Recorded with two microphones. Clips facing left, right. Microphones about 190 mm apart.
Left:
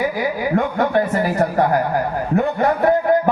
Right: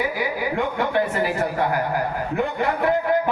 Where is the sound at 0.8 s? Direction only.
45° left (ahead or behind).